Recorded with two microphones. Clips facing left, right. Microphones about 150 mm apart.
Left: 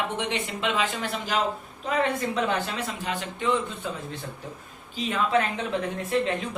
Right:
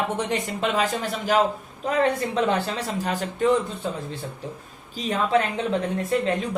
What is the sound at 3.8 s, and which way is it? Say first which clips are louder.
Speech: right 3 dB; 35° right (ahead or behind).